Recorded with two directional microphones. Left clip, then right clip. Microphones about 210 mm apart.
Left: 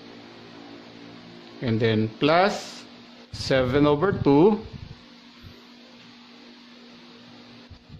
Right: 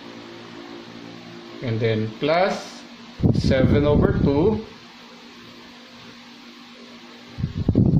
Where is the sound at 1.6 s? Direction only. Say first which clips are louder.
Even; 40° left (ahead or behind).